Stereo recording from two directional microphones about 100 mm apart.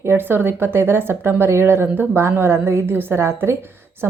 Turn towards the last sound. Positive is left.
turn(degrees=-25)  # may be behind; listen again after turning